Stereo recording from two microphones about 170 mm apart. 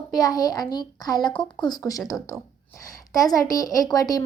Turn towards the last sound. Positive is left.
turn(degrees=20)  # may be behind; listen again after turning